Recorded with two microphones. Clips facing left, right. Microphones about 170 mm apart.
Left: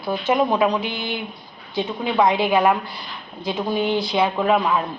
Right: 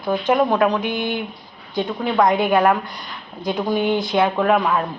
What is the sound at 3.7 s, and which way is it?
Speech, 50° right (ahead or behind).